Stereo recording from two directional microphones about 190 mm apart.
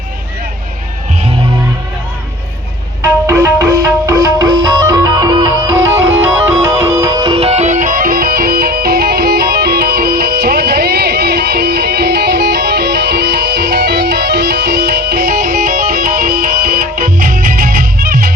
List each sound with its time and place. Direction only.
3.0 s music: 15° right (ahead or behind); by 18.3 s 55° right (ahead or behind)